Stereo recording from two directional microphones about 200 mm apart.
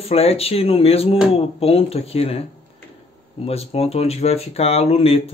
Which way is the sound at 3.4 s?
30° left (ahead or behind).